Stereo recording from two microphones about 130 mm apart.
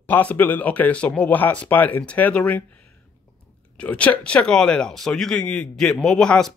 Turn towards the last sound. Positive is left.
turn(degrees=5)  # may be behind; listen again after turning